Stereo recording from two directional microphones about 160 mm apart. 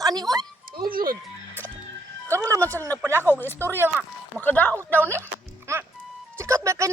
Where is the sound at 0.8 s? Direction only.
65° right (ahead or behind).